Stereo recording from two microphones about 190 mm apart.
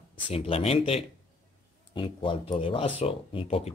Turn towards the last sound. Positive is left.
turn(degrees=35)  # may be behind; listen again after turning